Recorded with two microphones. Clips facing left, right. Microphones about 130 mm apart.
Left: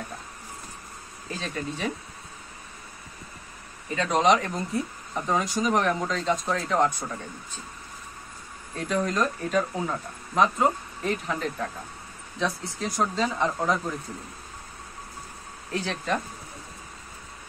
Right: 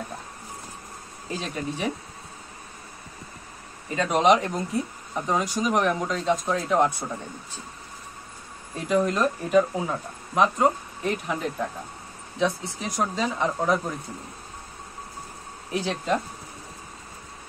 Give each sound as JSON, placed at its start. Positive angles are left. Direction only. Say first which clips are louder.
{"t": 1.4, "sound": "speech", "louder": "right 1 dB", "side_deg": -15}
{"t": 3.9, "sound": "speech", "louder": "right 2 dB", "side_deg": -10}
{"t": 8.7, "sound": "speech", "louder": "right 3 dB", "side_deg": -10}
{"t": 12.9, "sound": "speech", "louder": "even", "side_deg": -10}
{"t": 15.7, "sound": "speech", "louder": "right 3 dB", "side_deg": -15}